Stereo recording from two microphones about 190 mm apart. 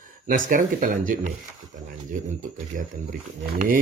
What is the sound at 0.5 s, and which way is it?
Speech, 45° right (ahead or behind).